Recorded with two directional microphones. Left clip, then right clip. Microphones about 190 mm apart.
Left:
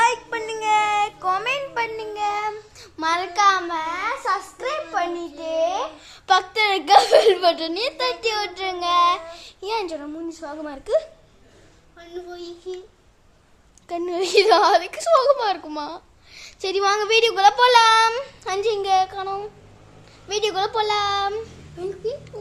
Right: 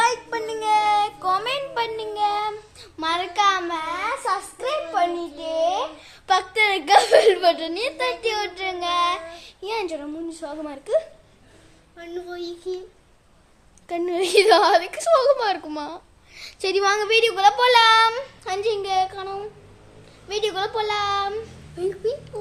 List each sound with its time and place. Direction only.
0.0 s a sound: 15° left (ahead or behind)
2.7 s child singing: 25° left (ahead or behind)
4.9 s a sound: 10° left (ahead or behind)
8.2 s child singing: 20° left (ahead or behind)
11.9 s child singing: 20° right (ahead or behind)
13.8 s a woman's voice: 5° left (ahead or behind); by 21.4 s 25° left (ahead or behind)
22.0 s speech: 15° right (ahead or behind)